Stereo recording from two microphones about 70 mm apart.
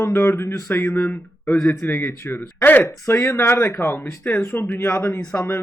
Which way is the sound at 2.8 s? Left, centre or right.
Left.